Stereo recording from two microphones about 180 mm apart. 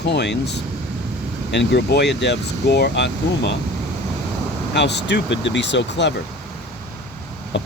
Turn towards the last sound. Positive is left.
turn(degrees=70)  # may be behind; listen again after turning